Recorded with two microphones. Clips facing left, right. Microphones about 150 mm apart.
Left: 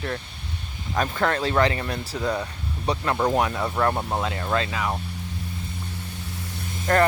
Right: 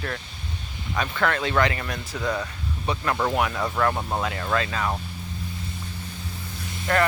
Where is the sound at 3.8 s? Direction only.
25° left (ahead or behind).